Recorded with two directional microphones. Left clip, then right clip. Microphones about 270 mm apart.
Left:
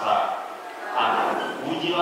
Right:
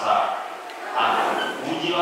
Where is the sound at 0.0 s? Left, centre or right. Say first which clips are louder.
Right 2 dB; centre.